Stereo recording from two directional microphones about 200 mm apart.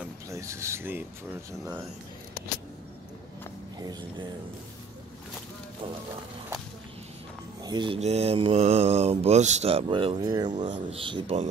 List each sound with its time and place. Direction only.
0.3 s speech: 15° right (ahead or behind)
3.8 s speech: 20° right (ahead or behind)
7.6 s mantra: 20° right (ahead or behind)
10.7 s speech: 30° right (ahead or behind)